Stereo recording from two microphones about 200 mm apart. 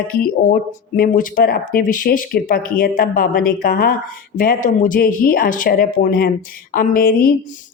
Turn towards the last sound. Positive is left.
turn(degrees=45)  # may be behind; listen again after turning